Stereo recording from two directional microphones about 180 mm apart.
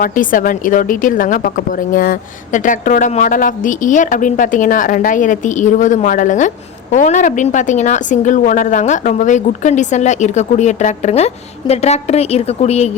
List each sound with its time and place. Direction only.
0.0 s a woman's voice: 50° left (ahead or behind)